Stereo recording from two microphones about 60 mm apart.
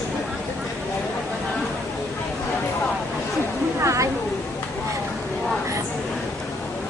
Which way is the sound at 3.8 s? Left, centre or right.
Right.